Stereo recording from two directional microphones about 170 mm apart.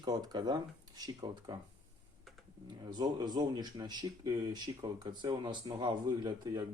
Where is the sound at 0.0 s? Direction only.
25° right (ahead or behind).